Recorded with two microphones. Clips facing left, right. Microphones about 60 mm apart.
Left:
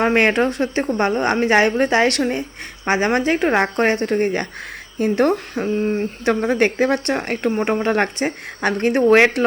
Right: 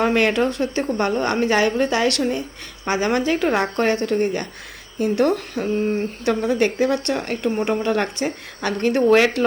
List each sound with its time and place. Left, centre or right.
0.0 s a woman's voice: left